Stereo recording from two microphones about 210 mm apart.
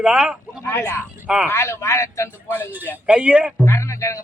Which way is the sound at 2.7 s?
10° right (ahead or behind).